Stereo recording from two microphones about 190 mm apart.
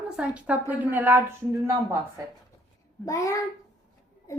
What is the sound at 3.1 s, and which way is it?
Speech, 15° left (ahead or behind).